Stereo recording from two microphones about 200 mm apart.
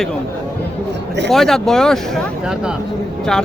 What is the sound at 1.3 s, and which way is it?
Speech, centre (ahead or behind).